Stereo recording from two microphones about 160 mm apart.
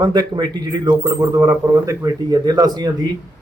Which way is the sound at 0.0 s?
25° right (ahead or behind).